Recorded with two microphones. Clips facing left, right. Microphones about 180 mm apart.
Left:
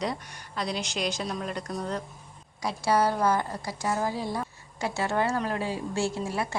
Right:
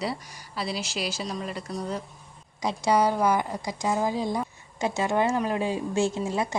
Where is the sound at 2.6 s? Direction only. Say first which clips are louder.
Right 2 dB; 15° right (ahead or behind).